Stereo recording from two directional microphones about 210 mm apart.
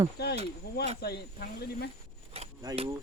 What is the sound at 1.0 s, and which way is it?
Speech, 50° left (ahead or behind).